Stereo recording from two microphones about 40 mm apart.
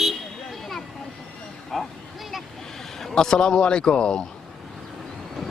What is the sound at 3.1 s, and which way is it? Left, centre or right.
A man's voice, centre.